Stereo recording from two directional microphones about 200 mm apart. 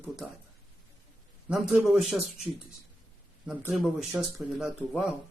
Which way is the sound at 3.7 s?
Centre (ahead or behind).